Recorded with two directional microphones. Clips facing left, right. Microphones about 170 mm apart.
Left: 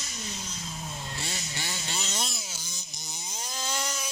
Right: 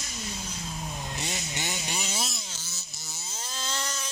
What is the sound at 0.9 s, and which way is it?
Vehicle, 20° right (ahead or behind).